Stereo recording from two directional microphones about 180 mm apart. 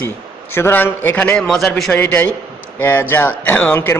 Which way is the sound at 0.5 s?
10° left (ahead or behind).